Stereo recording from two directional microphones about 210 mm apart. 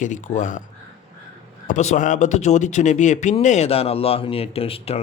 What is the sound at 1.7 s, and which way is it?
A man's voice, 35° left (ahead or behind).